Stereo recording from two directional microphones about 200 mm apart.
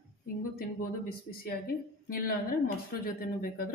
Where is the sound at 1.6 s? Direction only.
45° left (ahead or behind).